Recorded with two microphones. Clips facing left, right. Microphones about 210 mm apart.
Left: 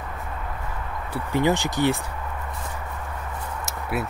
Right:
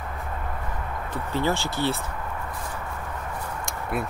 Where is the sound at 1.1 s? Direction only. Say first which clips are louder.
Left 4 dB; 15° left (ahead or behind).